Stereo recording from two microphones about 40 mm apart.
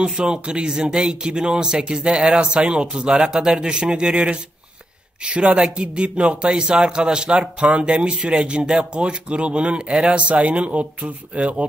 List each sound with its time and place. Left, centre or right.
0.0 s speech: centre
7.3 s speech: right